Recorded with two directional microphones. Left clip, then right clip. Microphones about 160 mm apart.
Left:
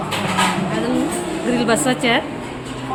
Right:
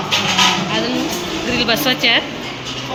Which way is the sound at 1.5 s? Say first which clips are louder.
Right 2 dB; 25° left (ahead or behind).